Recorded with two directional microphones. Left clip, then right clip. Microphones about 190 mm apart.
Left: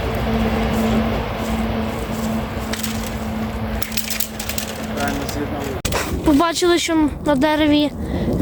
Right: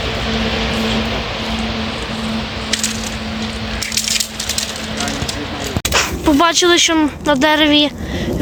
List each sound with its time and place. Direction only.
5.9 s speech: centre (ahead or behind)